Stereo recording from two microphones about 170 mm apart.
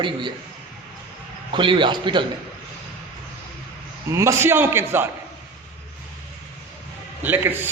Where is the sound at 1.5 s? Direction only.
30° right (ahead or behind).